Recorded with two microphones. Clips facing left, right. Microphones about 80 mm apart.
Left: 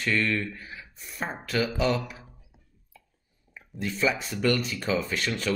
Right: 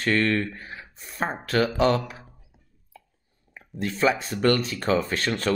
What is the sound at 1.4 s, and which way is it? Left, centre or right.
Speech, right.